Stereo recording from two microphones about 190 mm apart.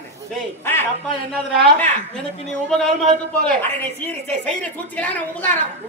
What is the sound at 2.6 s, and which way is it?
A man's voice, centre (ahead or behind).